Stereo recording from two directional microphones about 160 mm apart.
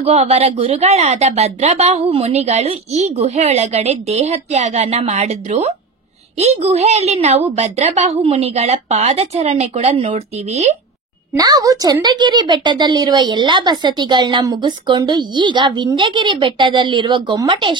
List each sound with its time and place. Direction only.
0.0 s speech: 40° right (ahead or behind)
11.3 s a woman's voice: 25° right (ahead or behind)